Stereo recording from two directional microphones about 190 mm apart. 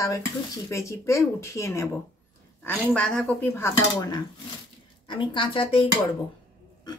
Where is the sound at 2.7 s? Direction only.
5° left (ahead or behind); by 4.2 s 20° left (ahead or behind).